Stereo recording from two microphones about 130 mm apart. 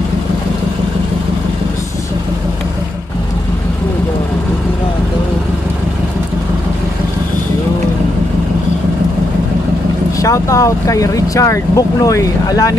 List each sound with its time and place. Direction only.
10.2 s speech: 25° left (ahead or behind)